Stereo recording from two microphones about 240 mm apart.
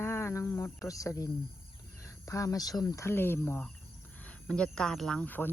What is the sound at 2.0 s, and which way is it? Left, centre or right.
Speech, centre.